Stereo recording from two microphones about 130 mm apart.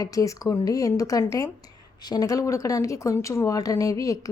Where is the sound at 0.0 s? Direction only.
25° left (ahead or behind).